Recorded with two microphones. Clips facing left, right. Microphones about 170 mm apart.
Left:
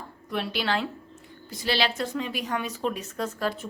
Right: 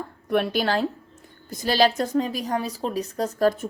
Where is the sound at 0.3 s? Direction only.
55° right (ahead or behind).